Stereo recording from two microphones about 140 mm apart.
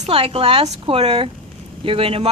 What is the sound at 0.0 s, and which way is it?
A woman's voice, 45° right (ahead or behind).